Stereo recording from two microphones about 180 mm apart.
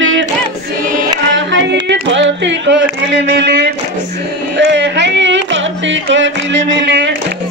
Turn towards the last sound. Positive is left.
turn(degrees=-90)